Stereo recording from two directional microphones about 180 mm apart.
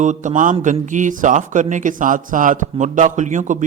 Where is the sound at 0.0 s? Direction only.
45° right (ahead or behind).